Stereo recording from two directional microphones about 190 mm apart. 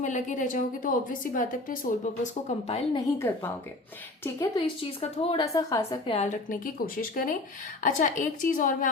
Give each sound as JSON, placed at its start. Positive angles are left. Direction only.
{"t": 0.0, "sound": "a woman's voice", "side_deg": 40}
{"t": 2.2, "sound": "a woman's voice", "side_deg": 35}
{"t": 3.2, "sound": "a woman's voice", "side_deg": 10}
{"t": 6.1, "sound": "a woman's voice", "side_deg": 40}